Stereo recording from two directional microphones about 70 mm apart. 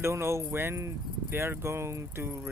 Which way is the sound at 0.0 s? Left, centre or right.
Right.